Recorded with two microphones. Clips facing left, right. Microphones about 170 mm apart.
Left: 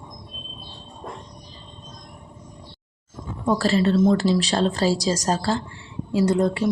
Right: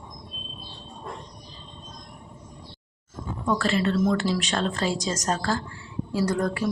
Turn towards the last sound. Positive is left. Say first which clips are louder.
# left 5 dB
turn(degrees=25)  # may be behind; listen again after turning